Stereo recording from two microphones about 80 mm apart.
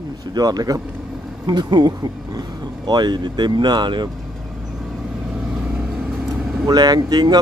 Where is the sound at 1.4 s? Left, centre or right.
Right.